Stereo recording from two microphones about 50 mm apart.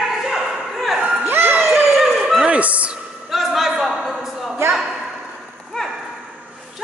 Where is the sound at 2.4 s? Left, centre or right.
Right.